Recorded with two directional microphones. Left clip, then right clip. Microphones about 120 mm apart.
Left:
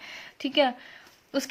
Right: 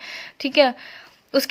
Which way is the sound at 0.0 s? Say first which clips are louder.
Right 6 dB; 35° right (ahead or behind).